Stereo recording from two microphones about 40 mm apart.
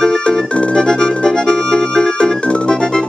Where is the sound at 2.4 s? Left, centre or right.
Left.